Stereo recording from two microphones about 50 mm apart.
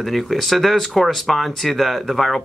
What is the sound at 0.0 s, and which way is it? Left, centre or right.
Speech, centre.